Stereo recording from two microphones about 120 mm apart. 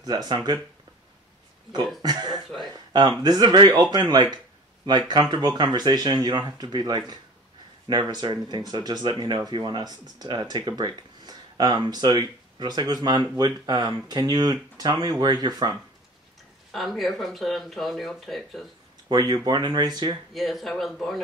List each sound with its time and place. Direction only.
0.0 s speech: 35° right (ahead or behind)
2.0 s speech: 35° right (ahead or behind)
16.7 s speech: centre (ahead or behind)
19.0 s speech: 35° right (ahead or behind)
20.3 s speech: centre (ahead or behind)